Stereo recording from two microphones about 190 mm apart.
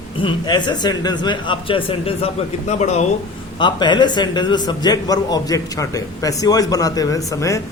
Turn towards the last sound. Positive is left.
turn(degrees=15)  # may be behind; listen again after turning